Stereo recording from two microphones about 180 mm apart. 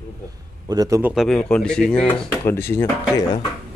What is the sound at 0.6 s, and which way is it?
Speech, 20° right (ahead or behind).